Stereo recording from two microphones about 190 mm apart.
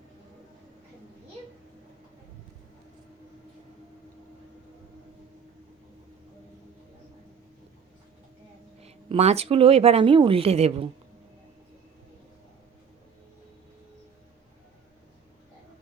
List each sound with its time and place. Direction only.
8.8 s speech: 35° right (ahead or behind)